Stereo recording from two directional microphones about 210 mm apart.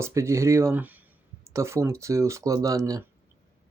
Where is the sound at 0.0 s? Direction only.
15° right (ahead or behind).